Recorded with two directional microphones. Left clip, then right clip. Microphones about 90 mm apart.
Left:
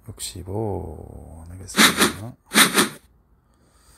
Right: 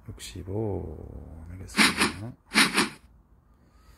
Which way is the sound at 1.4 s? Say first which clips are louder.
Left 3 dB; 15° left (ahead or behind).